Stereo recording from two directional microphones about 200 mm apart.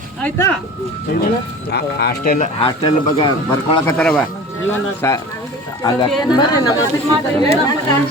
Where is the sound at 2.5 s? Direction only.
25° left (ahead or behind).